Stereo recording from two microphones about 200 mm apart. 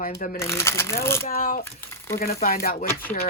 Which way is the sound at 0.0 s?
45° left (ahead or behind).